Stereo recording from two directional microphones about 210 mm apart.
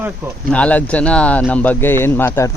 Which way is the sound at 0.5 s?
5° left (ahead or behind).